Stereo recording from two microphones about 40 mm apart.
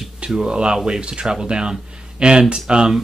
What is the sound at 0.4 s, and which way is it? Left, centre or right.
Speech, right.